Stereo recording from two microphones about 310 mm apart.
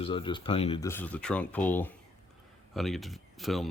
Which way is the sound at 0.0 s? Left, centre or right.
Centre.